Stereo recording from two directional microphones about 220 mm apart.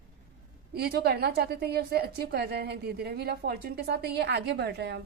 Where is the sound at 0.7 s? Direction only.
45° right (ahead or behind).